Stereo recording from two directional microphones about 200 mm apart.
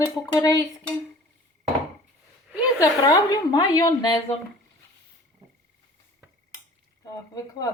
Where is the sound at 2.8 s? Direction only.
20° left (ahead or behind).